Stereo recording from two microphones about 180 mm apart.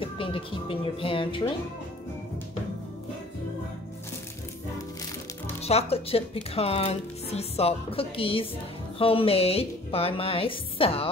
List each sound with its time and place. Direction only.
0.0 s speech: 30° left (ahead or behind)
5.6 s speech: 35° left (ahead or behind)